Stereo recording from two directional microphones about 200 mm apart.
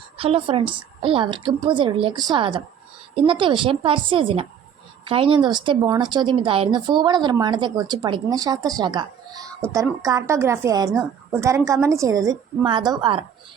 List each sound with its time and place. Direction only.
0.2 s a woman's voice: 25° right (ahead or behind)